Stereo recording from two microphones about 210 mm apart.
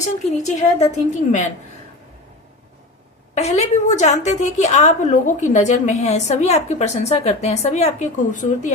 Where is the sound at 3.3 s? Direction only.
30° left (ahead or behind).